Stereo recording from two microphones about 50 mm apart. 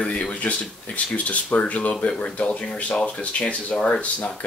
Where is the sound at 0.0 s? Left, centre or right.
Left.